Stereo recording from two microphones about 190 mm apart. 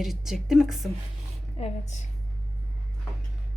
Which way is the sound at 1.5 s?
35° left (ahead or behind).